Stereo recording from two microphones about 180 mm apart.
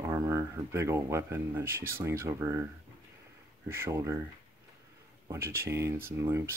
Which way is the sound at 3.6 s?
15° right (ahead or behind).